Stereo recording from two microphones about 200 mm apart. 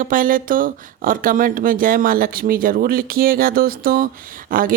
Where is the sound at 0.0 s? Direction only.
45° right (ahead or behind).